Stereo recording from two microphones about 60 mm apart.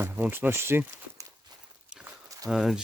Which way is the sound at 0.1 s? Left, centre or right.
Right.